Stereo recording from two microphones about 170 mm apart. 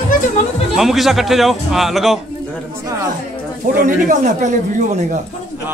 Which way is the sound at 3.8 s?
45° right (ahead or behind).